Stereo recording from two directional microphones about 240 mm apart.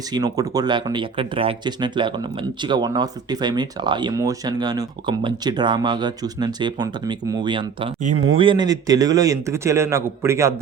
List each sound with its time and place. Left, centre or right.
0.1 s speech: centre